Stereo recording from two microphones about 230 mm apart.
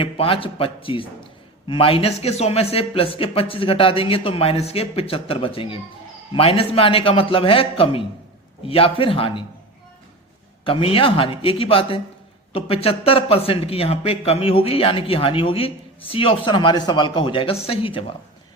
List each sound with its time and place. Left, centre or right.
0.0 s speech: left
10.6 s speech: left